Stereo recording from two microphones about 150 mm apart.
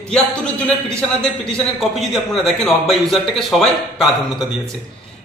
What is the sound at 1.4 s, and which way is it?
A man's voice, 5° left (ahead or behind).